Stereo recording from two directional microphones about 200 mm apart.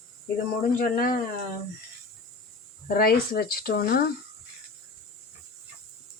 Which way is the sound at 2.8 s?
50° left (ahead or behind).